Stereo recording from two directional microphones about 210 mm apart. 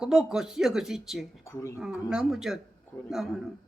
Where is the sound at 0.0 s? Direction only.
5° right (ahead or behind).